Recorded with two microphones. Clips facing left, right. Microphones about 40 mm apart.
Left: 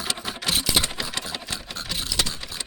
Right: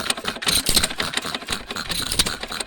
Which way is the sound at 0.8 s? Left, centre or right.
Right.